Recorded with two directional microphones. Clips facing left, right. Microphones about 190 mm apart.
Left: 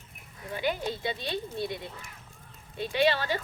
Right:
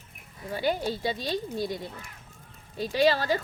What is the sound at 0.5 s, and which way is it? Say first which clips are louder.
Speech: right 3 dB; 35° right (ahead or behind).